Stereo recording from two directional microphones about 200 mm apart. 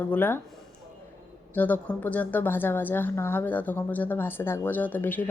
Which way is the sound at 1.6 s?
10° left (ahead or behind).